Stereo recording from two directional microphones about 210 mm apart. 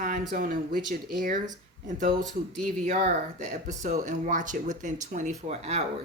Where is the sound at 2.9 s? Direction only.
35° right (ahead or behind).